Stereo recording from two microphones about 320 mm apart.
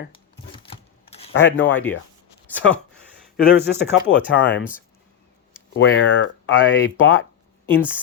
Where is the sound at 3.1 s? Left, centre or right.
Left.